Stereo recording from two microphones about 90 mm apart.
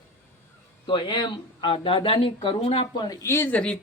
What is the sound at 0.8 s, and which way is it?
Speech, 60° left (ahead or behind).